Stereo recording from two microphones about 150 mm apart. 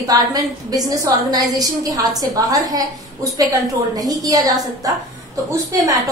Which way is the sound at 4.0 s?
25° right (ahead or behind).